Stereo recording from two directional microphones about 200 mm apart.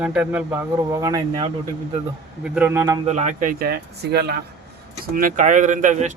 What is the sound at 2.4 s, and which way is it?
Speech, 5° right (ahead or behind).